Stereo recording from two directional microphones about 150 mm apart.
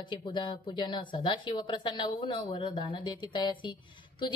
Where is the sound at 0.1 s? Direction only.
30° left (ahead or behind).